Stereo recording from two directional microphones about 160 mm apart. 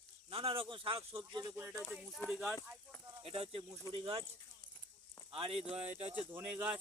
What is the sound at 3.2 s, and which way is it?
Speech, 35° right (ahead or behind).